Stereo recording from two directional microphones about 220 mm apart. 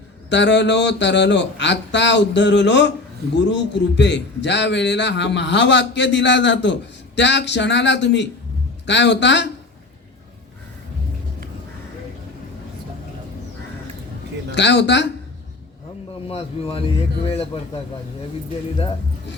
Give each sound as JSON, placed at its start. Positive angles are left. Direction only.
{"t": 0.3, "sound": "a man's voice", "side_deg": 55}
{"t": 14.5, "sound": "a man's voice", "side_deg": 55}
{"t": 16.3, "sound": "speech", "side_deg": 25}